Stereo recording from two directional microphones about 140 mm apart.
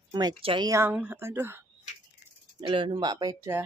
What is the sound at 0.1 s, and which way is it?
Speech, 30° right (ahead or behind).